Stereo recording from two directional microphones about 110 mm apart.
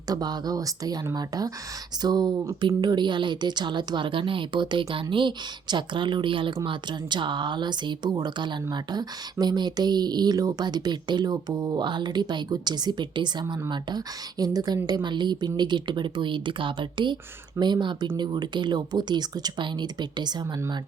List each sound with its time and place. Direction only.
0.1 s speech: 40° right (ahead or behind)
2.0 s speech: 40° right (ahead or behind)